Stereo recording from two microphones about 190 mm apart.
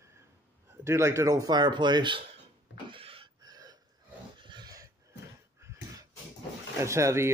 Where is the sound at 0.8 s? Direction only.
15° right (ahead or behind).